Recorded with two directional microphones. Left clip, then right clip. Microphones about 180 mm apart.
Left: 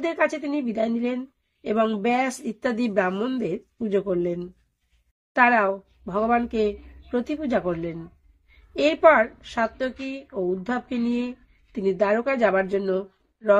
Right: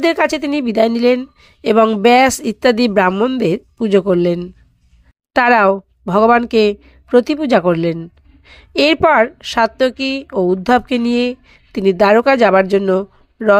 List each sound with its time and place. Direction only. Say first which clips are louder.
0.0 s a woman's voice: right 9 dB; 40° right (ahead or behind)
3.1 s a woman's voice: right 12 dB; 30° right (ahead or behind)
3.3 s a woman's voice: right 12 dB; 45° right (ahead or behind)